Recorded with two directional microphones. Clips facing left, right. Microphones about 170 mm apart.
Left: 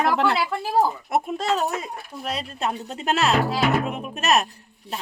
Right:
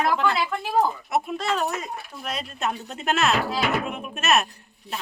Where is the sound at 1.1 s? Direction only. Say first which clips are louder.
Left 2 dB; 40° left (ahead or behind).